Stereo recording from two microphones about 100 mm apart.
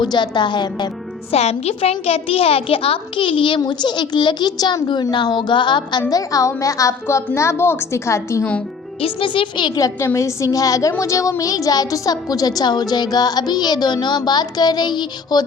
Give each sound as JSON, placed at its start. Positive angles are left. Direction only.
{"t": 0.0, "sound": "a woman's voice", "side_deg": 50}
{"t": 1.3, "sound": "a woman's voice", "side_deg": 90}
{"t": 9.0, "sound": "speech", "side_deg": 60}
{"t": 9.7, "sound": "a woman's voice", "side_deg": 35}